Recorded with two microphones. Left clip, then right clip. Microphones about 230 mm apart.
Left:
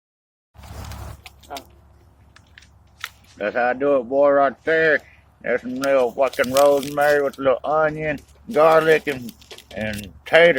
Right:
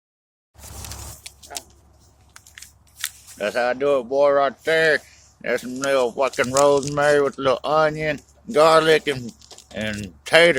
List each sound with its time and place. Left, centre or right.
3.3 s speech: right
9.2 s pigeon: centre
10.2 s speech: right